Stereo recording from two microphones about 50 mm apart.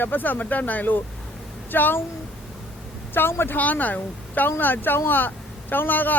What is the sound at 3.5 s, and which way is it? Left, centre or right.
Speech, left.